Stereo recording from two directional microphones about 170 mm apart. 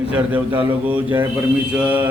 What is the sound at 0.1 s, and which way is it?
A man's voice, 10° right (ahead or behind).